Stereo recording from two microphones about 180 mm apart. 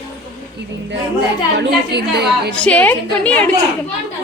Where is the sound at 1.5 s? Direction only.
65° right (ahead or behind).